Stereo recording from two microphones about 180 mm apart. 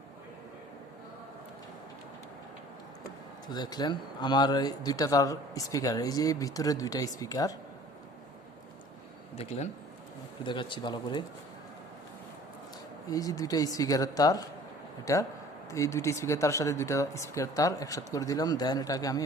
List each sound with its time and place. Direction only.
3.5 s speech: 25° left (ahead or behind)
9.3 s speech: 35° left (ahead or behind)
13.1 s speech: 20° left (ahead or behind)